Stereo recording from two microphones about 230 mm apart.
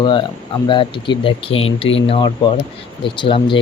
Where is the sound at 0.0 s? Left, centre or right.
Centre.